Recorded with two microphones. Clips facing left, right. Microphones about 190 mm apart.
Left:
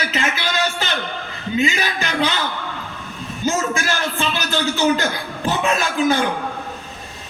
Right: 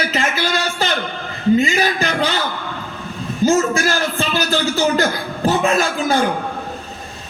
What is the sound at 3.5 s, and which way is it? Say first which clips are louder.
Speech: right 4 dB; 40° right (ahead or behind).